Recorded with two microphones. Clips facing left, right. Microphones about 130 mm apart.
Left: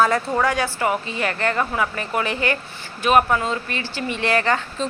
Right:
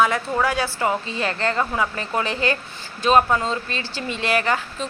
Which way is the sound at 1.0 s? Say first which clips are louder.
Left 1 dB; 25° right (ahead or behind).